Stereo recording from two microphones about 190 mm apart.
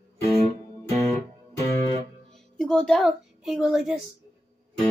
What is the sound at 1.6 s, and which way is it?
Guitar, 35° right (ahead or behind).